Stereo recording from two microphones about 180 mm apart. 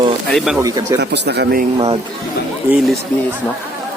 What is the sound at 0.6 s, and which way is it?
Speech, 20° right (ahead or behind).